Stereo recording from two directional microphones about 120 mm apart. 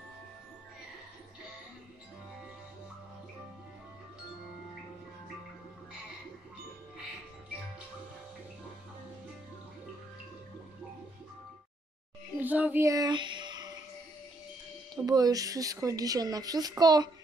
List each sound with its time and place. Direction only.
12.4 s a child's voice: 15° right (ahead or behind)
12.8 s a sound: 30° right (ahead or behind)
15.0 s speech: 30° right (ahead or behind)